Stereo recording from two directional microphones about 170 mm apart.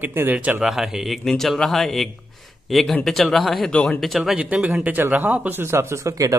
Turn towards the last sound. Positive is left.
turn(degrees=-20)  # may be behind; listen again after turning